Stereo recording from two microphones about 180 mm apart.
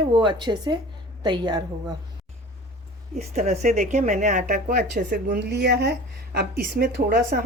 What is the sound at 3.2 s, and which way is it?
A woman's voice, 40° right (ahead or behind).